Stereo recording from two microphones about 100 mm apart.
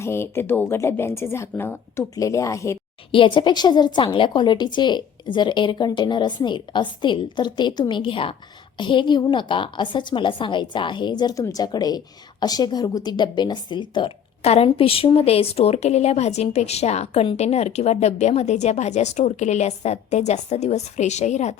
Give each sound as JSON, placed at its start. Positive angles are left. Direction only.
{"t": 0.0, "sound": "speech", "side_deg": 25}
{"t": 3.1, "sound": "a woman's voice", "side_deg": 60}
{"t": 14.4, "sound": "a woman's voice", "side_deg": 80}